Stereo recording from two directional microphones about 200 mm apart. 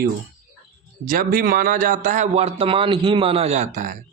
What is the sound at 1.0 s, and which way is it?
Speech, 45° right (ahead or behind).